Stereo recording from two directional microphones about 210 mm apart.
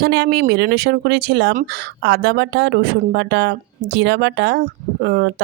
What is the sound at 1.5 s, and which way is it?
Speech, 40° right (ahead or behind).